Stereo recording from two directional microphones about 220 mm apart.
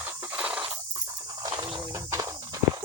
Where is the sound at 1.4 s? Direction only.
20° right (ahead or behind).